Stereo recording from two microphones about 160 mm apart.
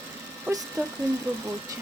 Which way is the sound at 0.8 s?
20° right (ahead or behind).